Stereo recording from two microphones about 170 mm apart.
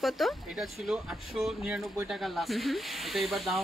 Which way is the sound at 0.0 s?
Centre (ahead or behind).